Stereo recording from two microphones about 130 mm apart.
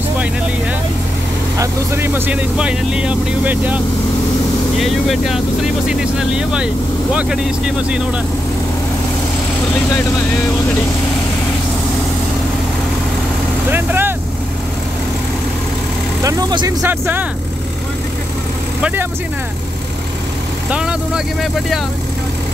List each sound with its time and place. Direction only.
1.6 s speech: 15° right (ahead or behind)
4.7 s speech: centre (ahead or behind)
13.7 s vehicle: 15° right (ahead or behind)
16.2 s speech: 25° right (ahead or behind)
16.8 s speech: 15° right (ahead or behind)
18.8 s speech: 10° right (ahead or behind)
20.7 s speech: 5° right (ahead or behind)